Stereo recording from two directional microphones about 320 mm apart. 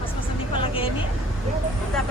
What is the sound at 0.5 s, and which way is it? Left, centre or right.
Vehicle, centre.